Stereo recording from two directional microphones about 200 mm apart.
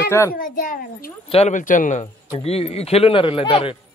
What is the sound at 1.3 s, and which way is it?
Speech, 35° left (ahead or behind).